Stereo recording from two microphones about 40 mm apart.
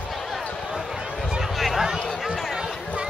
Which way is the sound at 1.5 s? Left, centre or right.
Centre.